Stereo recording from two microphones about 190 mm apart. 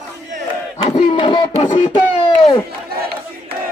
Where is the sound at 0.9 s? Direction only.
30° left (ahead or behind).